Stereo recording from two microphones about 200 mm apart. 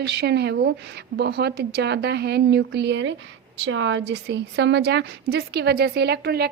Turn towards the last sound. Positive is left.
turn(degrees=-55)  # may be behind; listen again after turning